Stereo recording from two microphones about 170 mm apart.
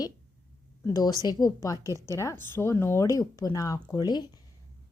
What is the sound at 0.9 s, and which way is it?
A woman's voice, 20° left (ahead or behind).